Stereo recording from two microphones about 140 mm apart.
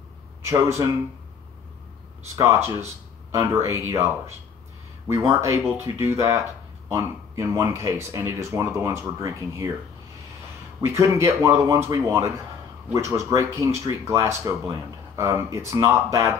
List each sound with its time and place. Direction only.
0.5 s speech: 20° right (ahead or behind)
2.3 s speech: 20° right (ahead or behind)
10.9 s speech: 20° right (ahead or behind)